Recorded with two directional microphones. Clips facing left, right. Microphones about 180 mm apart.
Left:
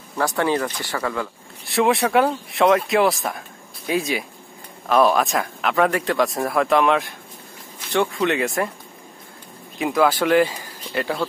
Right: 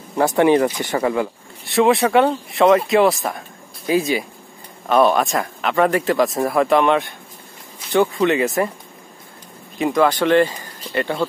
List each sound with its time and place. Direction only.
0.1 s speech: 20° right (ahead or behind)
1.6 s speech: centre (ahead or behind)
9.8 s speech: 5° left (ahead or behind)